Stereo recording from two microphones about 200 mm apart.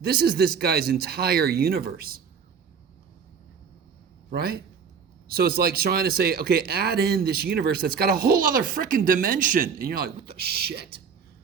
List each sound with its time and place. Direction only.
0.0 s speech: 50° right (ahead or behind)
4.3 s speech: 50° right (ahead or behind)